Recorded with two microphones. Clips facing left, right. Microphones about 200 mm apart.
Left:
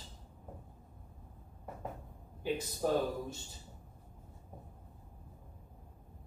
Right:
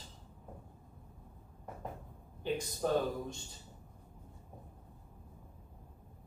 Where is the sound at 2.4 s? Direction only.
5° left (ahead or behind).